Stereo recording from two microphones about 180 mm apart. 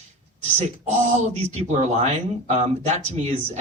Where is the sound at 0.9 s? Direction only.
35° right (ahead or behind).